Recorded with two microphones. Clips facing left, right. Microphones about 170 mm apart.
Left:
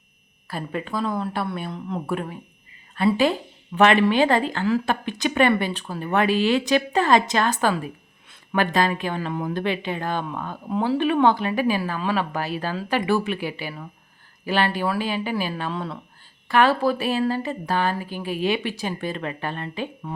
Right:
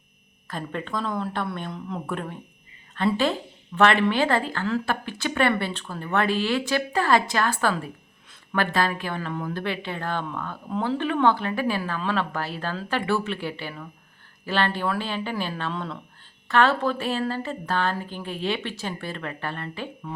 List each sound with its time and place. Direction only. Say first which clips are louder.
0.4 s a woman's voice: left 2 dB; 10° left (ahead or behind)